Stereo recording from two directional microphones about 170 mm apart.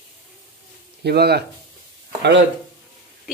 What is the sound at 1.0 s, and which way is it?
Speech, 70° right (ahead or behind).